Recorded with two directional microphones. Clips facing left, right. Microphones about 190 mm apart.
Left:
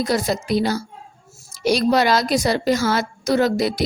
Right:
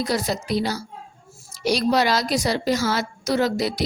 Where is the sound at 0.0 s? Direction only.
50° left (ahead or behind).